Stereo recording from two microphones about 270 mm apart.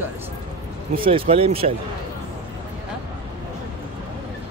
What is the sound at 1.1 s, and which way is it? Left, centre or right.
Speech, right.